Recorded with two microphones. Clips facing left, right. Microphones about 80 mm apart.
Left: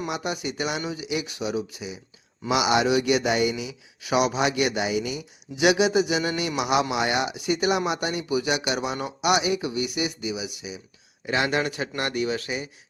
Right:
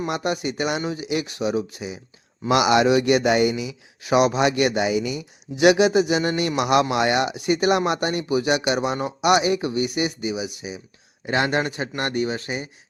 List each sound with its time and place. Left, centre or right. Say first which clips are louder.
0.1 s a man's voice: right 4 dB; right
9.7 s speech: right 4 dB; right